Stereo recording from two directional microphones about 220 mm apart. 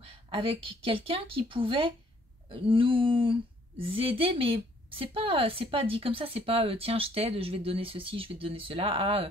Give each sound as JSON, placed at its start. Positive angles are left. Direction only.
{"t": 0.0, "sound": "speech", "side_deg": -25}